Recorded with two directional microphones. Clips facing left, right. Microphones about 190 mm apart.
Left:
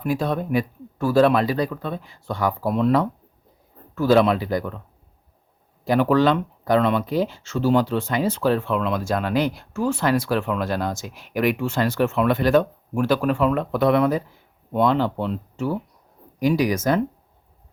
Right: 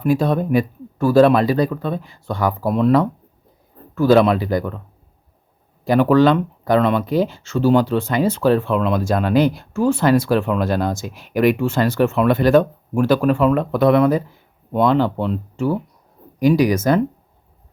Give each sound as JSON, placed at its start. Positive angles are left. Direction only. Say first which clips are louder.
{"t": 0.0, "sound": "speech", "louder": "right 6 dB", "side_deg": -40}
{"t": 2.2, "sound": "speech", "louder": "right 3 dB", "side_deg": -60}
{"t": 5.8, "sound": "speech", "louder": "right 4 dB", "side_deg": -55}
{"t": 16.4, "sound": "speech", "louder": "right 5 dB", "side_deg": -55}